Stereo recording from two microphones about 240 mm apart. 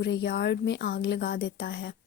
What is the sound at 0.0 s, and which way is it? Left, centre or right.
Speech, left.